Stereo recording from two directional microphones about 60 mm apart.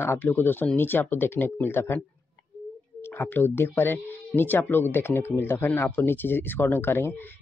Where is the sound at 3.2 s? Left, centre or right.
Left.